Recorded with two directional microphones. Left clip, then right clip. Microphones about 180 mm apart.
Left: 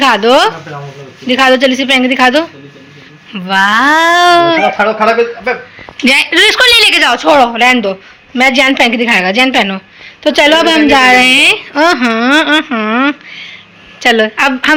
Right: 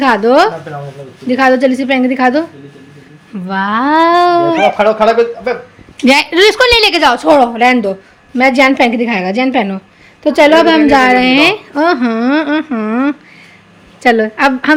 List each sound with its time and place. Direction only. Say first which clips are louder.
0.0 s a woman's voice: left 1 dB; 10° right (ahead or behind)
4.8 s a man's voice: even; 50° right (ahead or behind)
6.1 s a woman's voice: left 1 dB; 15° right (ahead or behind)